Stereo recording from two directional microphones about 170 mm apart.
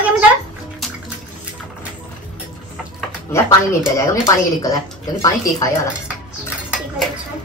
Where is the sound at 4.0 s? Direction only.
20° left (ahead or behind).